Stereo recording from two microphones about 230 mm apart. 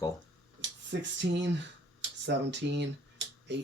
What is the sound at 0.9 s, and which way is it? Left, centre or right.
Speech, right.